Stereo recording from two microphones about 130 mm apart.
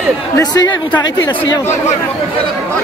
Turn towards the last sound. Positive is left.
turn(degrees=35)  # may be behind; listen again after turning